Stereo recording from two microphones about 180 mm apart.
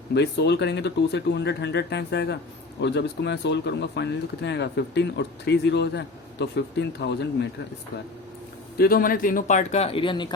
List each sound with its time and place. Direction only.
0.1 s speech: 70° left (ahead or behind)
8.8 s a man's voice: 55° left (ahead or behind); by 10.2 s 25° left (ahead or behind)